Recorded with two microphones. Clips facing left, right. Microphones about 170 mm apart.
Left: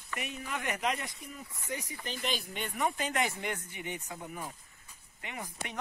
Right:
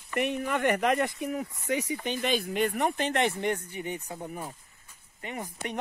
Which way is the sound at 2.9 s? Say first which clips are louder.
Right 6 dB; 60° right (ahead or behind).